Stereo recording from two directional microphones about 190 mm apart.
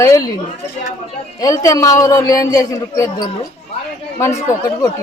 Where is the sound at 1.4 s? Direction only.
20° left (ahead or behind).